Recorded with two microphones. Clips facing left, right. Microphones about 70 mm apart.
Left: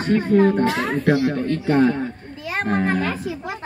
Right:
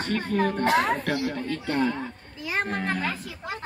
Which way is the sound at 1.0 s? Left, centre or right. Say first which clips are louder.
Left 9 dB; left.